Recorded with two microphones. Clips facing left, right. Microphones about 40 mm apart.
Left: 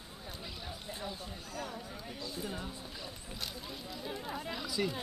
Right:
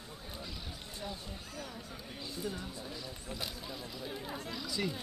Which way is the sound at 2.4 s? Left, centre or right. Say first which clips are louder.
Right 2 dB; centre.